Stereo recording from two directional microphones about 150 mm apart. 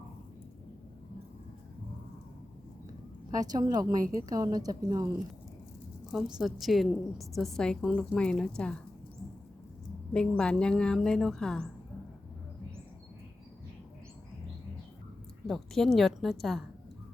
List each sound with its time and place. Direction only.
3.3 s a woman's voice: 25° right (ahead or behind)
6.1 s a woman's voice: centre (ahead or behind)
10.1 s a woman's voice: 5° left (ahead or behind)
15.4 s a woman's voice: 5° left (ahead or behind)